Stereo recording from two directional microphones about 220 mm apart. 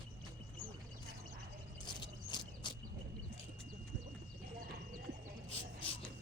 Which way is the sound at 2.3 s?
20° left (ahead or behind).